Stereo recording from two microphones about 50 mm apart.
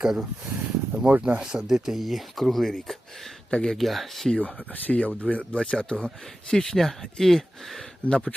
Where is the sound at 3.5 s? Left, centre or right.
Centre.